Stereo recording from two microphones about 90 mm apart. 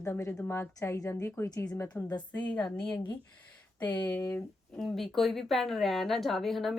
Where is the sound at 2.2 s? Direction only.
20° left (ahead or behind).